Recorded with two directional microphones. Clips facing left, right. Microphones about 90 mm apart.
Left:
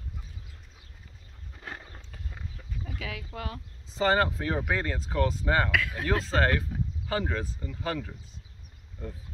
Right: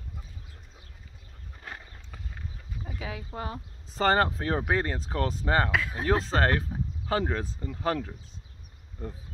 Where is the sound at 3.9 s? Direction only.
45° right (ahead or behind).